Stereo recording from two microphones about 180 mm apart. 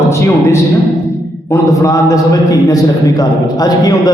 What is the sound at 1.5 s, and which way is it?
A man's voice, 15° left (ahead or behind).